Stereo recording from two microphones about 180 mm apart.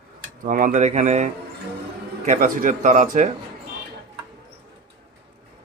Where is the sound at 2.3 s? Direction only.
50° right (ahead or behind).